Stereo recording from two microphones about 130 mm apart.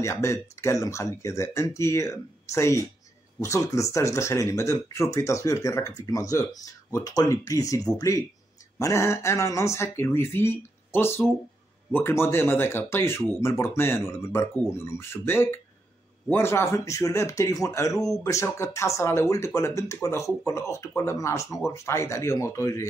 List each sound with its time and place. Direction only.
0.0 s speech: 25° left (ahead or behind)